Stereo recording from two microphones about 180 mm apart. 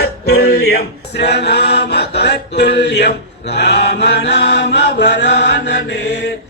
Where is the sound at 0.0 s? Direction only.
65° left (ahead or behind).